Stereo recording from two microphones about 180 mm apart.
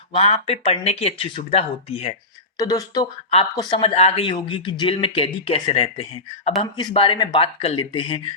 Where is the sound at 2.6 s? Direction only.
20° left (ahead or behind).